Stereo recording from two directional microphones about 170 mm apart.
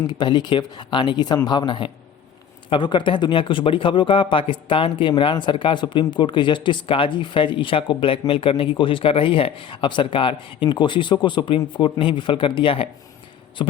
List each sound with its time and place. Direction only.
0.1 s speech: 25° left (ahead or behind)